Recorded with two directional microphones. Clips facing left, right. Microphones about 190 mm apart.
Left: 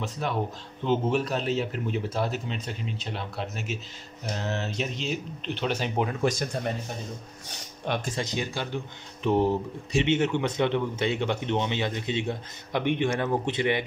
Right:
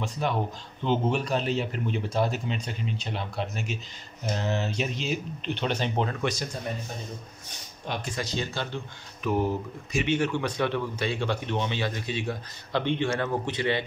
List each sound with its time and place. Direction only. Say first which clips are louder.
0.0 s a man's voice: right 1 dB; centre (ahead or behind)
7.8 s speech: left 4 dB; 55° left (ahead or behind)
8.2 s speech: left 1 dB; 15° left (ahead or behind)
9.2 s speech: left 3 dB; 30° left (ahead or behind)